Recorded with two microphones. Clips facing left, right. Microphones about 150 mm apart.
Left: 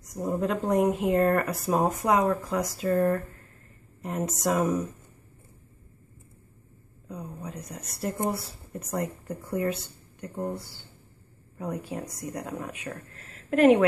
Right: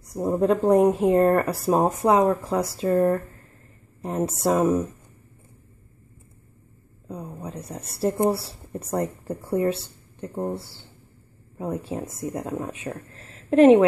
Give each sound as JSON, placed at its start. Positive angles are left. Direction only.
{"t": 0.0, "sound": "speech", "side_deg": -35}
{"t": 7.1, "sound": "speech", "side_deg": -30}